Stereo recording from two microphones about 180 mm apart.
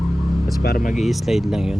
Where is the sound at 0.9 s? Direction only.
Centre (ahead or behind).